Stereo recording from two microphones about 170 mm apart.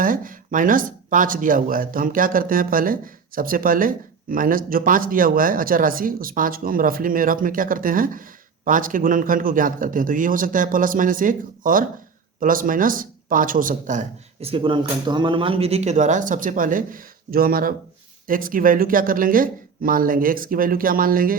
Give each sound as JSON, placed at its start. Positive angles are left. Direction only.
{"t": 0.0, "sound": "speech", "side_deg": -50}
{"t": 14.4, "sound": "speech", "side_deg": -30}